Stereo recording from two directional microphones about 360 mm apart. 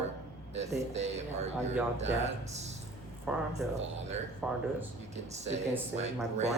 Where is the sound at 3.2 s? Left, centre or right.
Centre.